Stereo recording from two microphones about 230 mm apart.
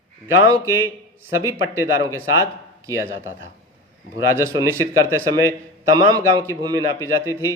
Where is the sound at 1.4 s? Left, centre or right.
Centre.